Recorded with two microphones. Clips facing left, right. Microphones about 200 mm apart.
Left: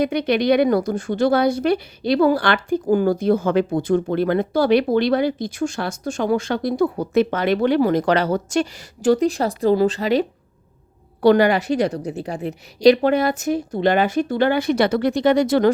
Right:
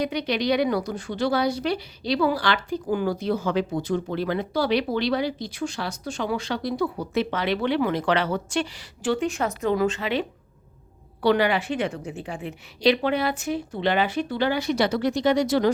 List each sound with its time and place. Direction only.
0.0 s speech: 50° left (ahead or behind)